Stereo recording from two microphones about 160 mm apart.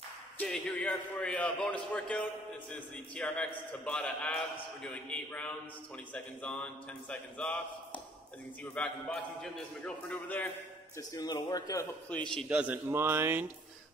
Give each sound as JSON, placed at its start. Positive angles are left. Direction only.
{"t": 0.4, "sound": "a man's voice", "side_deg": 5}
{"t": 11.0, "sound": "a man's voice", "side_deg": 20}
{"t": 12.1, "sound": "a man's voice", "side_deg": 5}
{"t": 12.4, "sound": "speech", "side_deg": -10}